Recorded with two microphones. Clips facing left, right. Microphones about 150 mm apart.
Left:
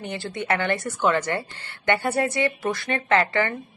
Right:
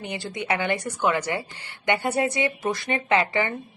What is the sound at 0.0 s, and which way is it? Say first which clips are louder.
Speech: left 1 dB; 15° right (ahead or behind).